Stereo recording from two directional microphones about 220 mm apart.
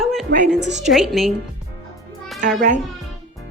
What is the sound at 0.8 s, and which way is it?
Speech, centre (ahead or behind).